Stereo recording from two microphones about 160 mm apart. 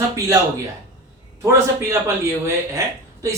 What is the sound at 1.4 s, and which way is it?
A man's voice, 20° right (ahead or behind).